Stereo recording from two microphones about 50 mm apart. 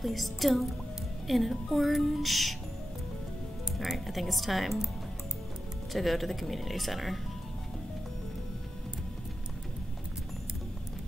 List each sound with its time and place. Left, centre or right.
0.0 s a woman's voice: centre
3.7 s a woman's voice: centre
5.9 s a woman's voice: centre